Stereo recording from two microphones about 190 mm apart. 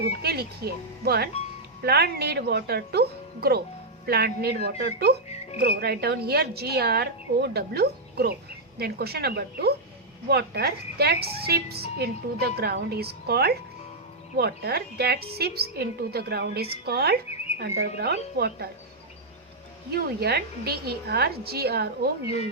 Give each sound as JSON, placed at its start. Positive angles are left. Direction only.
{"t": 0.0, "sound": "speech", "side_deg": -55}
{"t": 19.9, "sound": "speech", "side_deg": -55}